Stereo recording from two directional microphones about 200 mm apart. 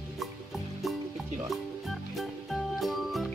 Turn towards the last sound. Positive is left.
turn(degrees=0)  # may be behind; listen again after turning